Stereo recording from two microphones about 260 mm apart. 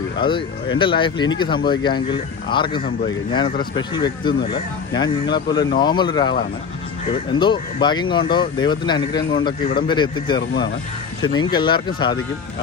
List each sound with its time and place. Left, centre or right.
0.2 s speech: centre
11.5 s speech: centre